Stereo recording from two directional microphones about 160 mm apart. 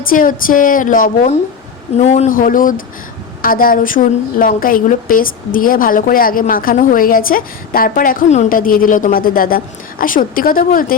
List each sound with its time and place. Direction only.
0.0 s a woman's voice: 60° left (ahead or behind)
2.0 s a woman's voice: 45° left (ahead or behind); by 10.9 s 60° left (ahead or behind)